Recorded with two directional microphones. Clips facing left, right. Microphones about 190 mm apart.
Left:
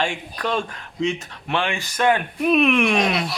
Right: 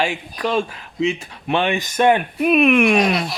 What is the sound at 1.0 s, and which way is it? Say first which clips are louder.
Speech: right 3 dB; 20° right (ahead or behind).